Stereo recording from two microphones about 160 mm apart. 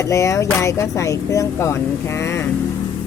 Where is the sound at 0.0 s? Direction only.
20° left (ahead or behind).